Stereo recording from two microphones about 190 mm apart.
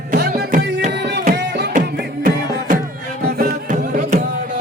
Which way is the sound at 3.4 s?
40° right (ahead or behind).